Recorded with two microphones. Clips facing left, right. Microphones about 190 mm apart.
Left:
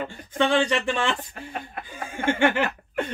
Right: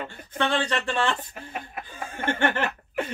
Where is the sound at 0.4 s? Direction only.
10° left (ahead or behind).